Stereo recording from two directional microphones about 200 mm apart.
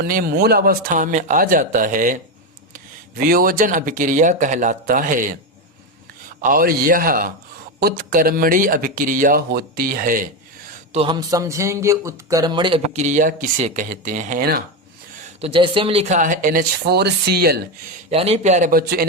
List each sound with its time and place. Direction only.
0.0 s speech: 50° right (ahead or behind)
6.4 s speech: 45° right (ahead or behind)
10.9 s a man's voice: 25° right (ahead or behind); by 14.6 s 45° right (ahead or behind)
15.4 s speech: 25° right (ahead or behind); by 17.6 s 50° right (ahead or behind)
18.1 s speech: 30° right (ahead or behind); by 19.0 s 50° right (ahead or behind)